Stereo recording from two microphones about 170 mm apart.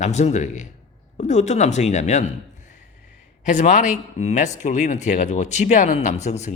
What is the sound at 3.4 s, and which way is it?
A man's voice, 45° left (ahead or behind).